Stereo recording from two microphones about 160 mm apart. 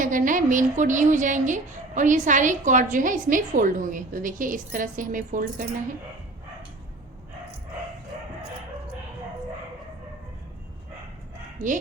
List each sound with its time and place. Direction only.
0.0 s a woman's voice: 55° right (ahead or behind)